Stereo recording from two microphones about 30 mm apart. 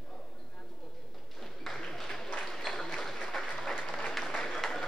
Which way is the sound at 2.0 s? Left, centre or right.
Centre.